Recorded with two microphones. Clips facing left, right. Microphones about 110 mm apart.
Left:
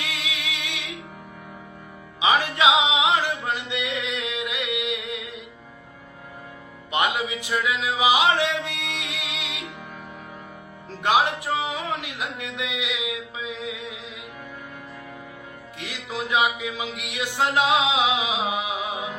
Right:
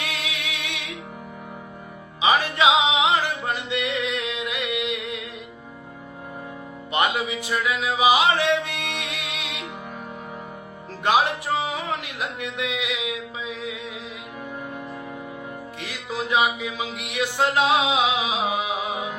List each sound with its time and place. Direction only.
0.0 s music: 15° left (ahead or behind)
2.2 s music: 15° left (ahead or behind)
6.9 s a sound: 15° left (ahead or behind)
11.0 s music: 15° left (ahead or behind)
15.8 s music: 15° left (ahead or behind)